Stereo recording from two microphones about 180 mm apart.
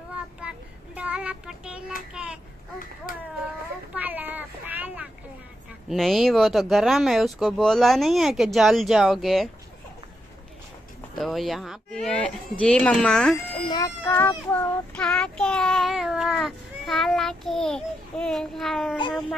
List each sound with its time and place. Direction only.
0.4 s child singing: 5° right (ahead or behind)
2.1 s a child's voice: 5° right (ahead or behind)
3.1 s a child's voice: 50° left (ahead or behind)
3.9 s a sound: 10° right (ahead or behind)
5.9 s child singing: centre (ahead or behind)
11.1 s child singing: centre (ahead or behind)
13.7 s child singing: 15° left (ahead or behind); by 18.9 s centre (ahead or behind)